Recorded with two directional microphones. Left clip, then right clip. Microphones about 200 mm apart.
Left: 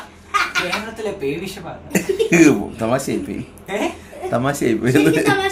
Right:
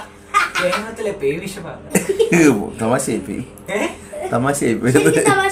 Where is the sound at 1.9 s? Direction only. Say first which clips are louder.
Even; 5° left (ahead or behind).